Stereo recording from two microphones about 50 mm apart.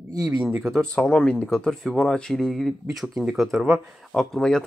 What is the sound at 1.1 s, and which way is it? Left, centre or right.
Speech, centre.